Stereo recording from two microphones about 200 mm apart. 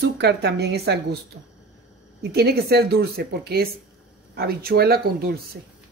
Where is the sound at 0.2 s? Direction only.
55° right (ahead or behind).